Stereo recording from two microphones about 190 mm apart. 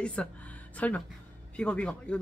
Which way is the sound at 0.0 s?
5° left (ahead or behind).